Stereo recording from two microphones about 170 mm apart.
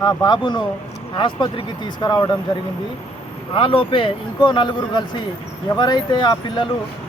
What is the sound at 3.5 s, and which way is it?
Speech, 30° left (ahead or behind).